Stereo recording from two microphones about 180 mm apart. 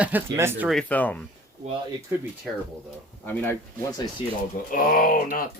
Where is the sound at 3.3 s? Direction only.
15° left (ahead or behind).